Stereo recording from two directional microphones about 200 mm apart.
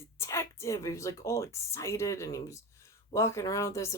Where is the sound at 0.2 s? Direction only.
15° left (ahead or behind).